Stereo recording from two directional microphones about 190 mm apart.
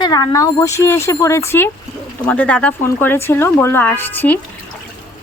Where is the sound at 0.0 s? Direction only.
20° left (ahead or behind).